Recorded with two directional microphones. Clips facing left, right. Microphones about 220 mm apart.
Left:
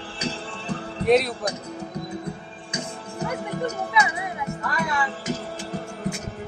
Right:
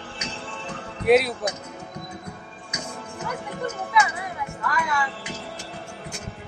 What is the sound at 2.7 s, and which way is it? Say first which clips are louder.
Music: left 2 dB; 35° left (ahead or behind).